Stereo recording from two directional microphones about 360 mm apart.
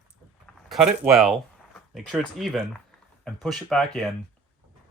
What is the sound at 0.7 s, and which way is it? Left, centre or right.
Speech, centre.